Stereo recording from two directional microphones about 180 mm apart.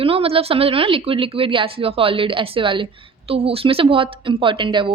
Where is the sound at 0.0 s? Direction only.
30° right (ahead or behind).